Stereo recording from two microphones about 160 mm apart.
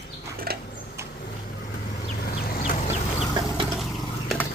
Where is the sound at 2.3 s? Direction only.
65° left (ahead or behind).